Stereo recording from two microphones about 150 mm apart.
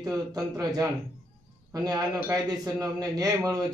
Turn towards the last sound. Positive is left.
turn(degrees=-25)  # may be behind; listen again after turning